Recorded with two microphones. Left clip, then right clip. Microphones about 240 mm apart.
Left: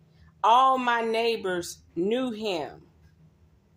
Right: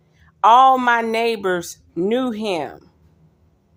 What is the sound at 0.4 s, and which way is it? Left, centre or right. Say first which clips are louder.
Speech: right 8 dB; right.